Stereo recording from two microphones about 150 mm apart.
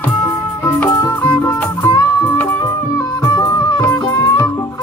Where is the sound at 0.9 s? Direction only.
20° left (ahead or behind).